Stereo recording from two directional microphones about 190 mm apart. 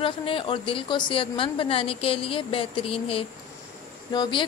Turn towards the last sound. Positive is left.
turn(degrees=25)  # may be behind; listen again after turning